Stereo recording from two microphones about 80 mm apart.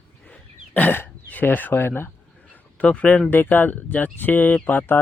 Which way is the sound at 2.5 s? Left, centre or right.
Centre.